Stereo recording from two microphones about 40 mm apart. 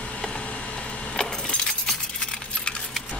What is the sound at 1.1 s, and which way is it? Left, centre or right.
Keys jangling, centre.